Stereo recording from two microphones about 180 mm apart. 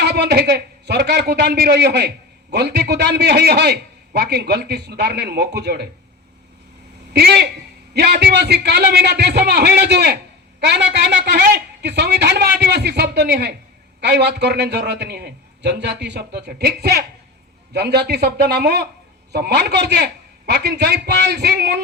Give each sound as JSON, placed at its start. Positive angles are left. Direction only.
{"t": 0.0, "sound": "a man's voice", "side_deg": -65}
{"t": 7.1, "sound": "a man's voice", "side_deg": -65}